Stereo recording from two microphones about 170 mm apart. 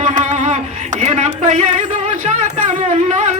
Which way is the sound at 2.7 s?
45° right (ahead or behind).